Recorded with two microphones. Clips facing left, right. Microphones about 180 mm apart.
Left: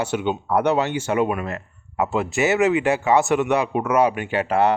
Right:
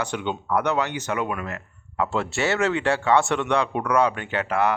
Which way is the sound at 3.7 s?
20° left (ahead or behind).